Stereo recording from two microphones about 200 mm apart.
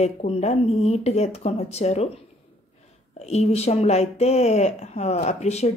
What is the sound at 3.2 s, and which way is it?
A woman's voice, 30° left (ahead or behind).